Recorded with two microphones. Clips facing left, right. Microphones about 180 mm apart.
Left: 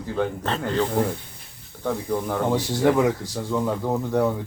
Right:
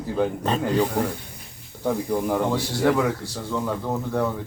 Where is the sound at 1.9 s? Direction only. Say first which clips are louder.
Right 2 dB; 10° right (ahead or behind).